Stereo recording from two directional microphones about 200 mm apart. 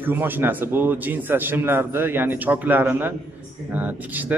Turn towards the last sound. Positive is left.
turn(degrees=-10)  # may be behind; listen again after turning